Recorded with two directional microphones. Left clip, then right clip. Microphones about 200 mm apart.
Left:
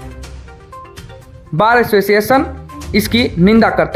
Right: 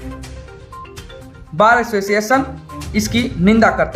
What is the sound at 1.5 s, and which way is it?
Speech, 35° left (ahead or behind).